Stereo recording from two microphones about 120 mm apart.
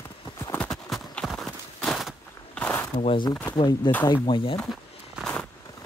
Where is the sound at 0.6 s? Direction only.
Centre (ahead or behind).